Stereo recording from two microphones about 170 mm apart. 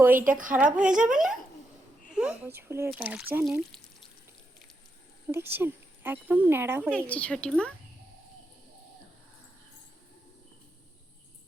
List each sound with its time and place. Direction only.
0.0 s speech: 10° right (ahead or behind)
0.3 s a woman's voice: 50° right (ahead or behind)
0.5 s speech: 5° right (ahead or behind)
2.1 s speech: 10° right (ahead or behind)
3.4 s speech: centre (ahead or behind)
5.3 s speech: 10° right (ahead or behind)
6.9 s a woman's voice: 5° left (ahead or behind)